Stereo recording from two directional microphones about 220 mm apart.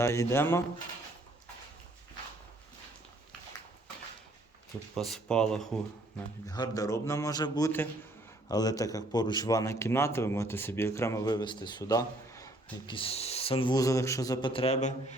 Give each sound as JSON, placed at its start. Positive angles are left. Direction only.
{"t": 0.0, "sound": "speech", "side_deg": 15}
{"t": 4.9, "sound": "speech", "side_deg": 0}
{"t": 6.5, "sound": "speech", "side_deg": 15}